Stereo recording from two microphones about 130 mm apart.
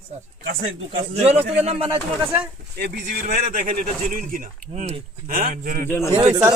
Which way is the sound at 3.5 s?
90° right.